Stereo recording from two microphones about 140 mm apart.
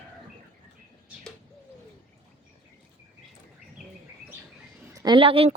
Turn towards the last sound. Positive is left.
turn(degrees=-40)  # may be behind; listen again after turning